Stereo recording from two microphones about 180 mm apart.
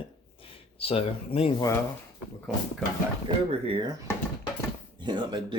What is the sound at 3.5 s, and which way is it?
Speech, 30° right (ahead or behind).